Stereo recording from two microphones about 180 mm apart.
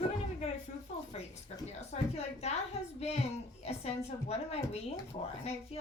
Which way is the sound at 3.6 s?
35° left (ahead or behind).